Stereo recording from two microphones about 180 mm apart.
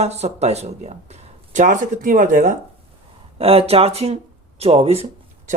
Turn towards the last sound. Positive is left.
turn(degrees=-35)  # may be behind; listen again after turning